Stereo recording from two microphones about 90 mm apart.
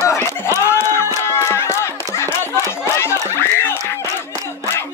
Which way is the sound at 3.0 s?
30° left (ahead or behind).